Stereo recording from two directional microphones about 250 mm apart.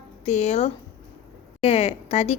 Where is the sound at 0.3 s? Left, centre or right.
Left.